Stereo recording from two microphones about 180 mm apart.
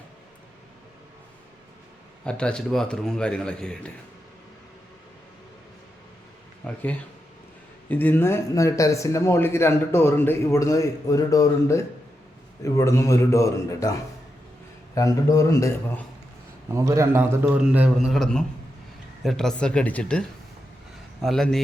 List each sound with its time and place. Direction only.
2.2 s a man's voice: 5° left (ahead or behind)
6.7 s speech: 5° left (ahead or behind)
14.9 s a man's voice: 20° left (ahead or behind)
16.7 s a man's voice: 15° right (ahead or behind); by 21.6 s centre (ahead or behind)